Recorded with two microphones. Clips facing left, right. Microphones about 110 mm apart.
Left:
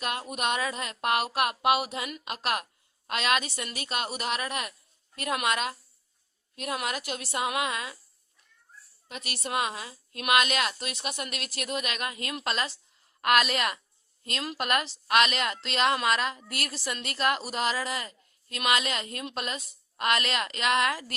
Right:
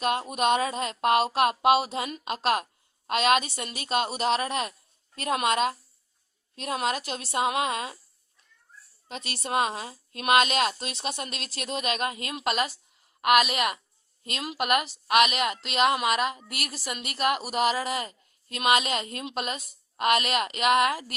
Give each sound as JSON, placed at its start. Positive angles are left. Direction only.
{"t": 0.0, "sound": "a woman's voice", "side_deg": -25}
{"t": 9.0, "sound": "a woman's voice", "side_deg": -25}